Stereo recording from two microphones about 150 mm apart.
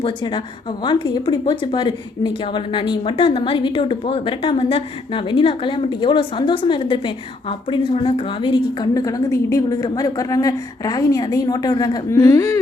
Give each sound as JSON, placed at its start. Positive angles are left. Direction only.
{"t": 0.0, "sound": "a woman's voice", "side_deg": 30}